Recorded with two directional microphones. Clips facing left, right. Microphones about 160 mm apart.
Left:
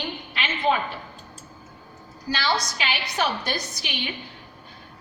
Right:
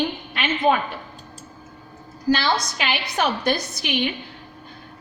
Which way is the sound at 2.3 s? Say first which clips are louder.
Right 5 dB; 55° right (ahead or behind).